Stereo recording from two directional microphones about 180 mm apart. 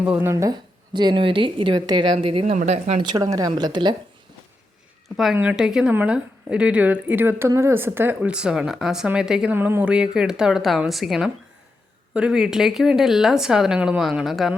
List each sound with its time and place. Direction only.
0.0 s speech: 10° right (ahead or behind); by 3.0 s 40° right (ahead or behind)
3.0 s speech: 20° right (ahead or behind)
5.0 s a woman's voice: centre (ahead or behind)